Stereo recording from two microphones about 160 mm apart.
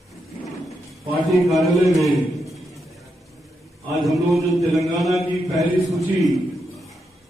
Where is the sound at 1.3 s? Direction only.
Centre (ahead or behind).